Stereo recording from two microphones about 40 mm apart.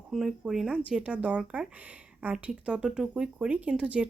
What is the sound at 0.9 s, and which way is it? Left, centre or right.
Speech, right.